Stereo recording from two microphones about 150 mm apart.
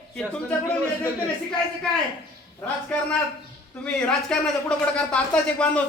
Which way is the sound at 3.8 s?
5° left (ahead or behind).